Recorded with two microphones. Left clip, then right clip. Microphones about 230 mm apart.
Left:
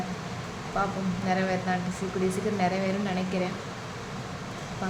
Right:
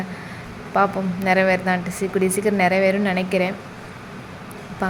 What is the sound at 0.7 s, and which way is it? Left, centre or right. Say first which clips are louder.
A woman's voice: right 10 dB; right.